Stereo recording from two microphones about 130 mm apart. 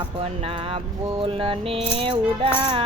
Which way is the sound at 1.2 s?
45° right (ahead or behind).